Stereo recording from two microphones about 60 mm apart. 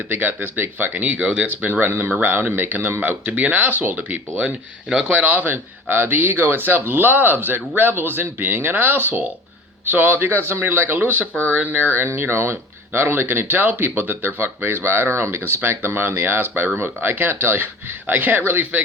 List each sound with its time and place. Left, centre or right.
0.1 s speech: right
4.9 s speech: centre
5.1 s speech: right